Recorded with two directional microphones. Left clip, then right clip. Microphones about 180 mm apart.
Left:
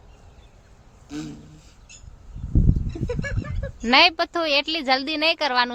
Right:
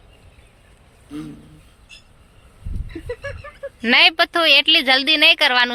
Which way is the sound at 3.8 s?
5° left (ahead or behind).